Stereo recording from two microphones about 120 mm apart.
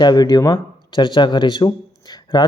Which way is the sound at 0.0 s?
35° left (ahead or behind).